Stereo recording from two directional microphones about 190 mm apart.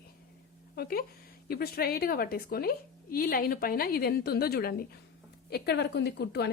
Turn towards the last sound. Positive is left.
turn(degrees=60)  # may be behind; listen again after turning